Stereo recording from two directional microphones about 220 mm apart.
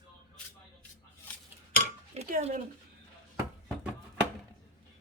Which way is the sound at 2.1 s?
30° right (ahead or behind).